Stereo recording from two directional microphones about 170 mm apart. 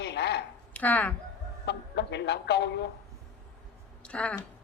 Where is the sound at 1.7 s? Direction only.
90° left.